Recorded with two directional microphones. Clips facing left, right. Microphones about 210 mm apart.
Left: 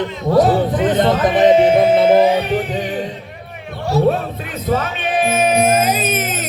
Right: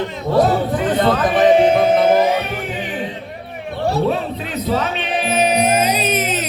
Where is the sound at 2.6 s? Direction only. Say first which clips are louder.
Left 5 dB; 35° left (ahead or behind).